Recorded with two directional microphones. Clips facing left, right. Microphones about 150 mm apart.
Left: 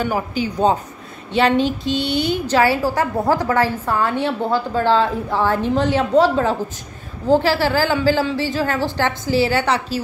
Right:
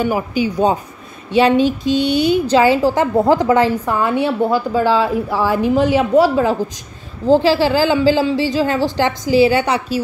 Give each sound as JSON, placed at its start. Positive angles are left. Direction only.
{"t": 0.0, "sound": "a woman's voice", "side_deg": -10}